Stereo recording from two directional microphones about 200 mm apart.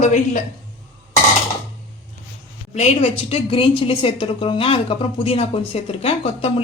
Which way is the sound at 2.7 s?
35° left (ahead or behind).